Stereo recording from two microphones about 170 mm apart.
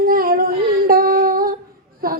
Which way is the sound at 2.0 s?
60° right (ahead or behind).